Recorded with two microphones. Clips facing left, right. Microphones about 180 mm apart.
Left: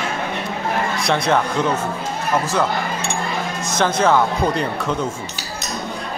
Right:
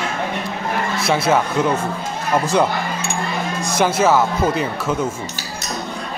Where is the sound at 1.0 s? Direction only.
5° right (ahead or behind).